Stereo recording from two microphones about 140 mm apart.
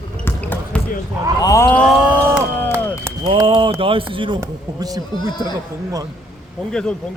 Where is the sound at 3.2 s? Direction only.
35° right (ahead or behind).